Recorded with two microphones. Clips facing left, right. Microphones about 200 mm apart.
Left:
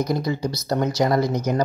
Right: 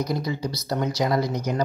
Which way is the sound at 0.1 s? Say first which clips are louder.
Left 3 dB; 50° left (ahead or behind).